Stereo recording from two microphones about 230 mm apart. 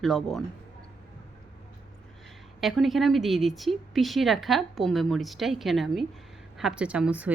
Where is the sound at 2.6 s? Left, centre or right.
Centre.